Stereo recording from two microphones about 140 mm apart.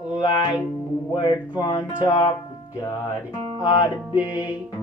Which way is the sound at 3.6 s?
30° left (ahead or behind).